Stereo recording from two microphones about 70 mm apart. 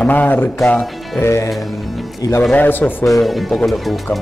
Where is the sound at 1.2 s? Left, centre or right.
Left.